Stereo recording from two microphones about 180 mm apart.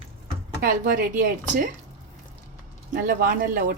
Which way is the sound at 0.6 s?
50° right (ahead or behind).